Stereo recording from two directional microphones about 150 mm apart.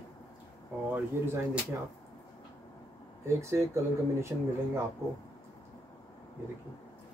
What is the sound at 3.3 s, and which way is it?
Speech, 20° right (ahead or behind).